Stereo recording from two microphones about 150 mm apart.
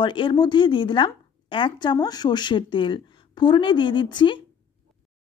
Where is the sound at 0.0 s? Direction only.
35° left (ahead or behind).